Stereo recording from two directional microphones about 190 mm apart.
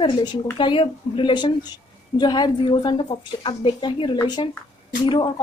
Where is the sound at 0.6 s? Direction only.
25° left (ahead or behind).